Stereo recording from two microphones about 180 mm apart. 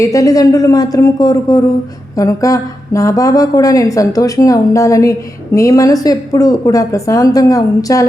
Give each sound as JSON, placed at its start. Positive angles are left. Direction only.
{"t": 0.0, "sound": "a woman's voice", "side_deg": 20}